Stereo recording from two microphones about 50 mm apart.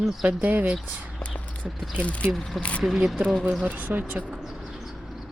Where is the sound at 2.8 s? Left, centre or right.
Centre.